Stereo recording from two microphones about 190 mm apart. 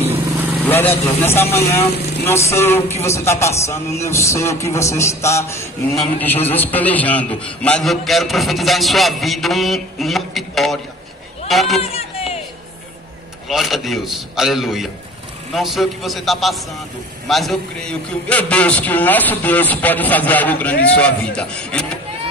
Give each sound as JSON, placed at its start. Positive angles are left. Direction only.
{"t": 0.0, "sound": "vehicle", "side_deg": -10}
{"t": 0.7, "sound": "a man's voice", "side_deg": 10}
{"t": 11.8, "sound": "a sound", "side_deg": 30}
{"t": 13.5, "sound": "a man's voice", "side_deg": 0}